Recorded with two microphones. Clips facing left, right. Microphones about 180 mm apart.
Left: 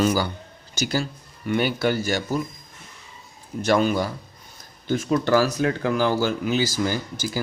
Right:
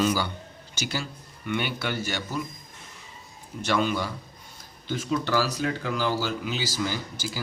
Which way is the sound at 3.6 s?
45° left (ahead or behind).